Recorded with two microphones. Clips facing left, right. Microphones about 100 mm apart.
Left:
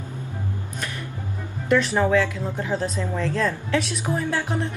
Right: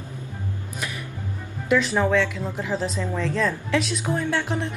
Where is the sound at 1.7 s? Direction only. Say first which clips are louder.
Left 1 dB; centre (ahead or behind).